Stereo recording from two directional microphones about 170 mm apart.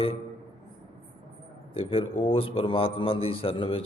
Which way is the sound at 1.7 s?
30° left (ahead or behind).